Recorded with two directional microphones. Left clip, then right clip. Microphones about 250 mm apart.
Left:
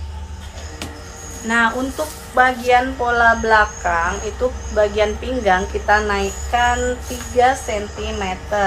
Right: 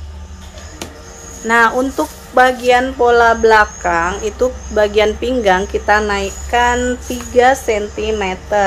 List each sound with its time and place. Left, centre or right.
1.5 s speech: centre
2.3 s speech: right